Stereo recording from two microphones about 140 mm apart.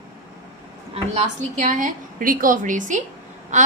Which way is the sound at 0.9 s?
55° right (ahead or behind).